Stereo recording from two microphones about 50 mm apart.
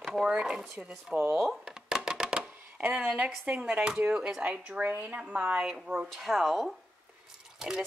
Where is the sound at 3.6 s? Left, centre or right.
Centre.